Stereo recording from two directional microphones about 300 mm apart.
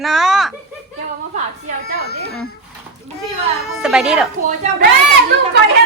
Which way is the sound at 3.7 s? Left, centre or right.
Centre.